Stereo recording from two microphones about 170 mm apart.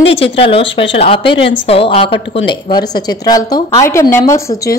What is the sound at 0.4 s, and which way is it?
A woman's voice, 35° left (ahead or behind).